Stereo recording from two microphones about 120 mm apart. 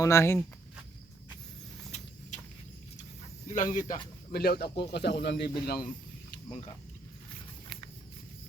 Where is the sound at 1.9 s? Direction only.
65° left (ahead or behind).